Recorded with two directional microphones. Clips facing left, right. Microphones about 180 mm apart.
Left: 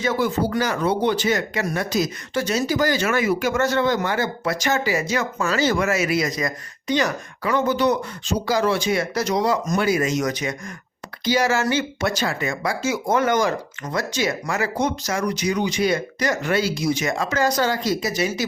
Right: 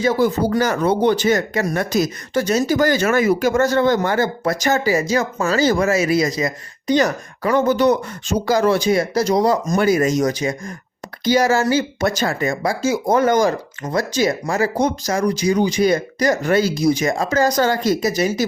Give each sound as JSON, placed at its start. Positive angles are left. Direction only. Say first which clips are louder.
{"t": 0.0, "sound": "speech", "louder": "right 4 dB", "side_deg": -40}